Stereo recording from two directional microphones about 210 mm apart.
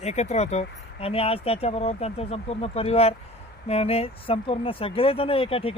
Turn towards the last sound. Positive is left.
turn(degrees=25)  # may be behind; listen again after turning